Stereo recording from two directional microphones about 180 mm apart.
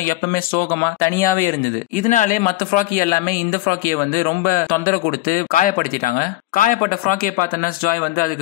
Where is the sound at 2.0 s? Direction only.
50° left (ahead or behind).